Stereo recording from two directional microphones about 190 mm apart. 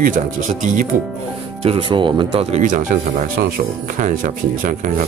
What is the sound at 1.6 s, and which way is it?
Speech, 30° right (ahead or behind).